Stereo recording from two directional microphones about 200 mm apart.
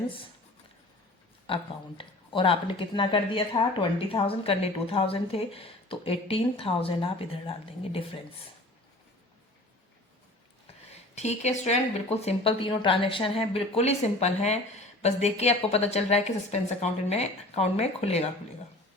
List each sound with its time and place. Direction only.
1.5 s speech: 25° left (ahead or behind)
11.1 s speech: 35° left (ahead or behind)